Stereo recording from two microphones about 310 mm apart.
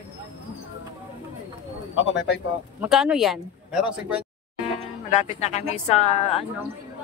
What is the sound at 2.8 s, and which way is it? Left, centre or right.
Speech, centre.